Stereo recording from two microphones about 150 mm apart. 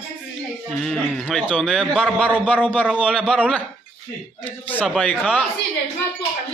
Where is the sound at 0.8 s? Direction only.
5° left (ahead or behind).